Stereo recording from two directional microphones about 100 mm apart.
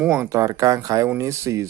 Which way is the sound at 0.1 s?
30° right (ahead or behind).